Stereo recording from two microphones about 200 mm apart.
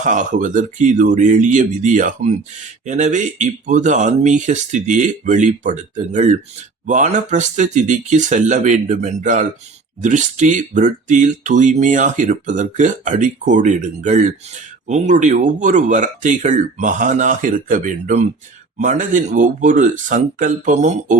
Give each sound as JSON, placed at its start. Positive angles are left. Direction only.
{"t": 0.0, "sound": "speech", "side_deg": -40}